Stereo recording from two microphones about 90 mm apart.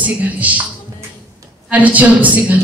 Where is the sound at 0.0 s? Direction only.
15° right (ahead or behind).